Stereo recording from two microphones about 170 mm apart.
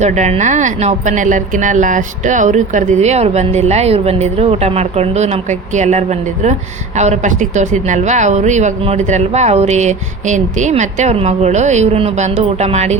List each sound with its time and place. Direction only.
0.0 s a woman's voice: 45° right (ahead or behind)